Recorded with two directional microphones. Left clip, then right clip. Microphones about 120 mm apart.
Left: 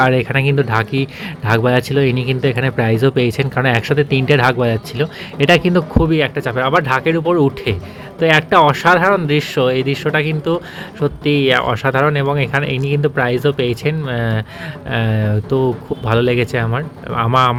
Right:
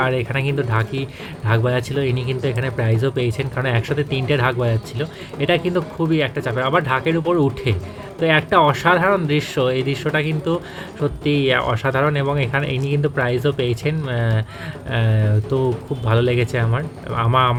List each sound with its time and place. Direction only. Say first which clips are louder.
0.0 s speech: left 6 dB; 35° left (ahead or behind)